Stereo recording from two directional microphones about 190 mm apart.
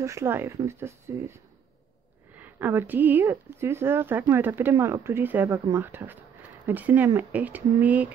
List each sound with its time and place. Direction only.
0.0 s speech: 15° right (ahead or behind)
2.3 s speech: 10° right (ahead or behind)